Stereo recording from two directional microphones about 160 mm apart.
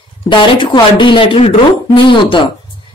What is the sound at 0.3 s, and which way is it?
A woman's voice, 30° left (ahead or behind).